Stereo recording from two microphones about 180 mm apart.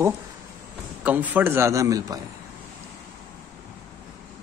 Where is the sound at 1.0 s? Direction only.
10° right (ahead or behind).